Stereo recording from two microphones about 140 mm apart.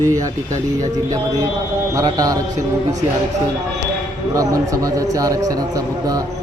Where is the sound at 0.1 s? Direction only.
25° right (ahead or behind).